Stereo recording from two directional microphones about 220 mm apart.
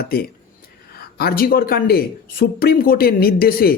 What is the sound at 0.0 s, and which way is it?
Speech, 45° left (ahead or behind).